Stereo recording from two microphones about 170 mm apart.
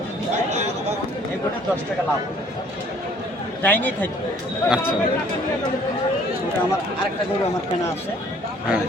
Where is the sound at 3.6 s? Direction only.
10° left (ahead or behind).